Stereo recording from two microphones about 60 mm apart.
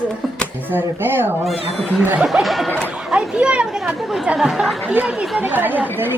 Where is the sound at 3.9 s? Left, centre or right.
Centre.